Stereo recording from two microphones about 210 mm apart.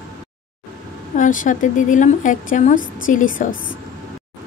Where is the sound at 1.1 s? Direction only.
40° left (ahead or behind).